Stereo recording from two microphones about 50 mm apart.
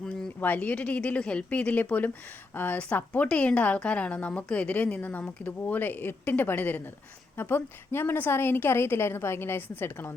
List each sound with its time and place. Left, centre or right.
0.3 s a woman's voice: left